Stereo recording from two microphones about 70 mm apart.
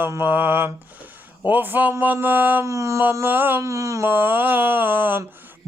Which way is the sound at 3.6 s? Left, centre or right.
Right.